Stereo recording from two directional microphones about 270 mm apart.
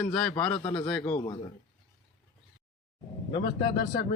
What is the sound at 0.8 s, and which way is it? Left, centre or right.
Speech, centre.